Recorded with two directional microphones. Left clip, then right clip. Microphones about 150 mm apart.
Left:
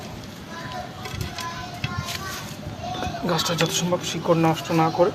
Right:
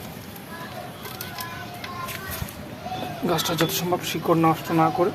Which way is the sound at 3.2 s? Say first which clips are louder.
Even; 30° right (ahead or behind).